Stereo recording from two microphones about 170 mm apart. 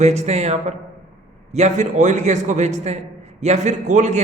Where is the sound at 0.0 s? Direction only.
40° right (ahead or behind).